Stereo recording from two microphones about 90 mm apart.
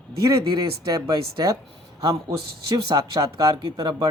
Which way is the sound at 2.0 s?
45° right (ahead or behind).